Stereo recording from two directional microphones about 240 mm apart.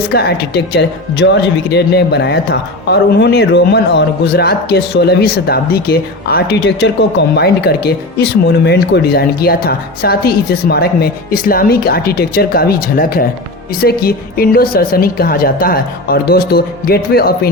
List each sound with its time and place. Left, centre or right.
0.1 s speech: left